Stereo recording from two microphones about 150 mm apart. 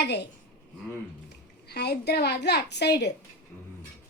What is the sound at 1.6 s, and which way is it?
A woman's voice, 90° left.